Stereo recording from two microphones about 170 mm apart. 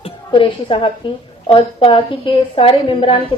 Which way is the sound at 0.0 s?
30° left (ahead or behind).